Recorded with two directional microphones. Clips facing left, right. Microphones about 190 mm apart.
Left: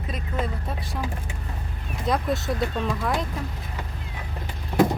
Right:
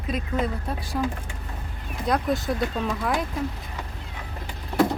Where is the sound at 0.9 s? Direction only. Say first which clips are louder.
Right 4 dB; 5° right (ahead or behind).